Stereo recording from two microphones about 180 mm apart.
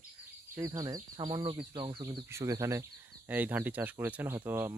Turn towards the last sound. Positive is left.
turn(degrees=-15)  # may be behind; listen again after turning